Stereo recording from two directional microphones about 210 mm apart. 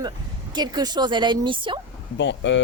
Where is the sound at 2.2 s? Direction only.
60° left (ahead or behind).